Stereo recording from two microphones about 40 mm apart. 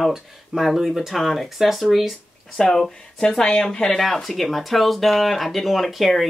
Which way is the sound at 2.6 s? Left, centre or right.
Centre.